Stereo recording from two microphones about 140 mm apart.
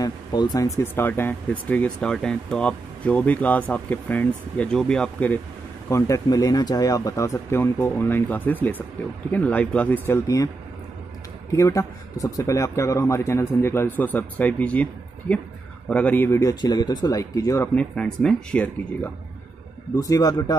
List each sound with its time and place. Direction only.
0.0 s speech: 30° left (ahead or behind); by 5.4 s 10° left (ahead or behind)
5.9 s speech: 20° left (ahead or behind)
11.5 s speech: 20° left (ahead or behind)
16.3 s speech: 25° left (ahead or behind)
17.7 s speech: 5° left (ahead or behind)
20.0 s speech: 25° left (ahead or behind)